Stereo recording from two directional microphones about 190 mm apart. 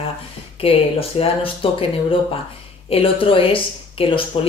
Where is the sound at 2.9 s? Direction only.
30° left (ahead or behind).